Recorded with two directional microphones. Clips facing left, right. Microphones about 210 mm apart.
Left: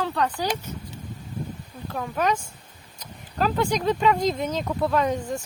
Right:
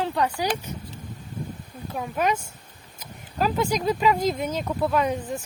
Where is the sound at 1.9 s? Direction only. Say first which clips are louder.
Even; 10° right (ahead or behind).